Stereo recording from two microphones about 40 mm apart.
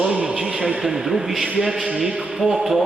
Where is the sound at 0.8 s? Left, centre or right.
Centre.